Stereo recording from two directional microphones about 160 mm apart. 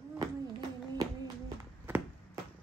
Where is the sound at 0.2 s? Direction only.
25° right (ahead or behind).